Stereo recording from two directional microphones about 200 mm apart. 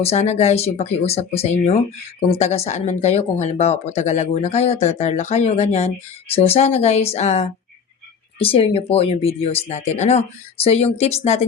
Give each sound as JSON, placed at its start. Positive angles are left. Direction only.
{"t": 0.0, "sound": "speech", "side_deg": 30}